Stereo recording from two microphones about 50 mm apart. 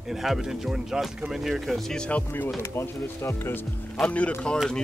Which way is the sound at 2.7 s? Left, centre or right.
Left.